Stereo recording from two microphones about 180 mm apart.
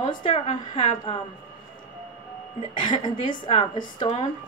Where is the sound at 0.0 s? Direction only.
30° left (ahead or behind).